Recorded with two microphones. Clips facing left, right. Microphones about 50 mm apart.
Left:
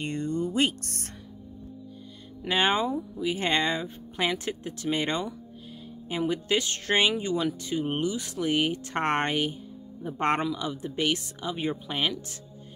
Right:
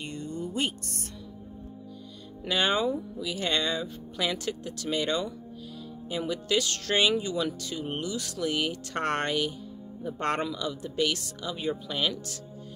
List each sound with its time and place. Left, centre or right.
0.0 s speech: left
2.4 s speech: left